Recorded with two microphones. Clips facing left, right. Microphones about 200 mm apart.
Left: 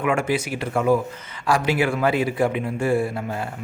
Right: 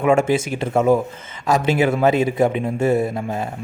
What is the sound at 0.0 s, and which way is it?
A man's voice, 25° right (ahead or behind).